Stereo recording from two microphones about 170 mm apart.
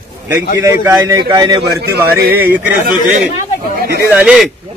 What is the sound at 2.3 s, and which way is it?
Speech, 10° right (ahead or behind).